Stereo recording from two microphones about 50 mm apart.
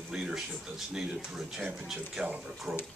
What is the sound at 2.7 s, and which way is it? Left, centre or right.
Speech, centre.